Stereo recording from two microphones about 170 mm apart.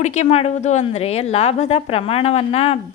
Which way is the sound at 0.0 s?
40° left (ahead or behind).